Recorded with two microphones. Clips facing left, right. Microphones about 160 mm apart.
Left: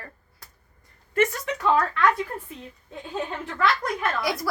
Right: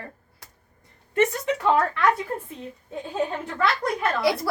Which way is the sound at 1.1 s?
20° right (ahead or behind).